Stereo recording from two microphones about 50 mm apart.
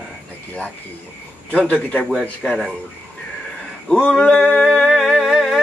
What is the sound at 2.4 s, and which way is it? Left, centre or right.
Mantra, centre.